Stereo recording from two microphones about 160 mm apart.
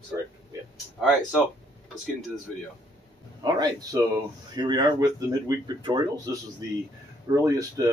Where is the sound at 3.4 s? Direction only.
25° right (ahead or behind).